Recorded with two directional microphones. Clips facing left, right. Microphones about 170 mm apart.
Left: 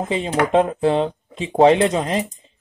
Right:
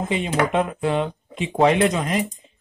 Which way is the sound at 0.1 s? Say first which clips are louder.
Left 4 dB; 30° left (ahead or behind).